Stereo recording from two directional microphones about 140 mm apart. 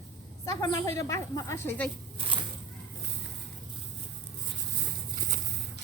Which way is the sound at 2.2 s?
40° right (ahead or behind).